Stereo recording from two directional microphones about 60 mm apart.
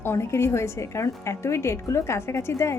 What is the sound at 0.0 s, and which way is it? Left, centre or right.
A woman's voice, left.